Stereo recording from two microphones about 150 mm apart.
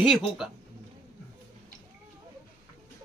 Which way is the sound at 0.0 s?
Centre (ahead or behind).